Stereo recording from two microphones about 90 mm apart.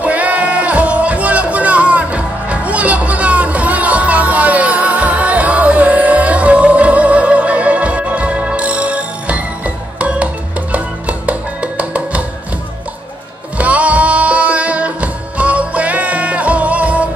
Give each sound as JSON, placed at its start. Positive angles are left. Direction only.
{"t": 0.0, "sound": "music", "side_deg": -15}
{"t": 13.6, "sound": "music", "side_deg": -15}